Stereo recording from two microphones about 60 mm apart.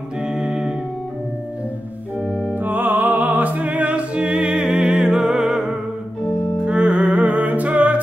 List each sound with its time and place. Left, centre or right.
0.2 s music: centre
2.2 s organ: centre
2.6 s music: right